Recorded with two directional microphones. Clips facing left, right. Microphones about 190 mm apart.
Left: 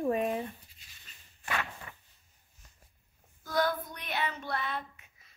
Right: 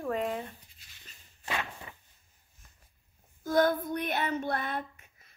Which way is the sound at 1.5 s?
20° right (ahead or behind).